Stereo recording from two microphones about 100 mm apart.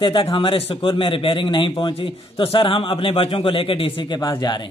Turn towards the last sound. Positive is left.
turn(degrees=45)  # may be behind; listen again after turning